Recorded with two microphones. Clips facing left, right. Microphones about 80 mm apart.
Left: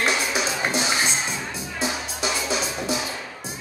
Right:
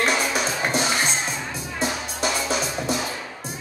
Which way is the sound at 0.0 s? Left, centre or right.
Right.